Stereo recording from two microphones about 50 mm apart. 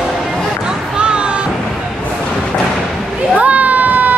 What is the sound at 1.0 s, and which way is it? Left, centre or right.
Music, centre.